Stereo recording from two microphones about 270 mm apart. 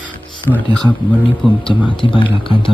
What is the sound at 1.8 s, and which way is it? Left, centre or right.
Speech, centre.